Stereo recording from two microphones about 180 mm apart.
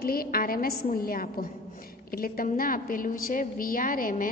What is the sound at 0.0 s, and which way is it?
A woman's voice, 55° left (ahead or behind).